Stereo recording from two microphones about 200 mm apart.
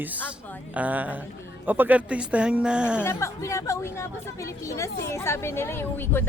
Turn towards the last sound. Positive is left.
turn(degrees=10)  # may be behind; listen again after turning